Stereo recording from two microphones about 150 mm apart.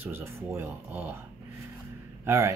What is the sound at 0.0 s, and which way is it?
Speech, 15° right (ahead or behind).